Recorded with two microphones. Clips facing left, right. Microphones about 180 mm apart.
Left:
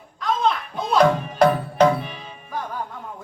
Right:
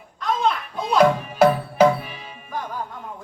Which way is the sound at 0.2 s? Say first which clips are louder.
Even; centre (ahead or behind).